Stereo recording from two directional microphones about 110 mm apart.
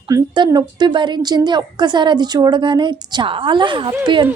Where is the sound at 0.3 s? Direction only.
40° right (ahead or behind).